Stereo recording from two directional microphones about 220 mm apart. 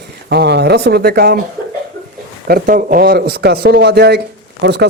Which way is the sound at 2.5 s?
40° right (ahead or behind).